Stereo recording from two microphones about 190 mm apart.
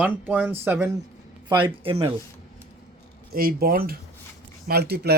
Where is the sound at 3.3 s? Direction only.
50° right (ahead or behind).